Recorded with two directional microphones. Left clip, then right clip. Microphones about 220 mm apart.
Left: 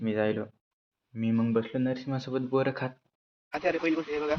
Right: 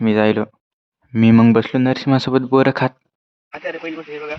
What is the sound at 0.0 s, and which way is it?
Speech, 45° right (ahead or behind).